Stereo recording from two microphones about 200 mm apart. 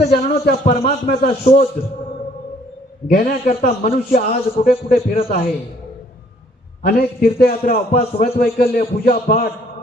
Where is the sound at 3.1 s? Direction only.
45° left (ahead or behind).